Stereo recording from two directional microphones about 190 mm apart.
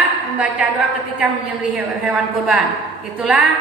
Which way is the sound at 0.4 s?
10° right (ahead or behind).